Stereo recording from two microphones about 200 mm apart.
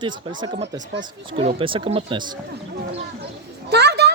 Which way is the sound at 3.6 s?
55° right (ahead or behind).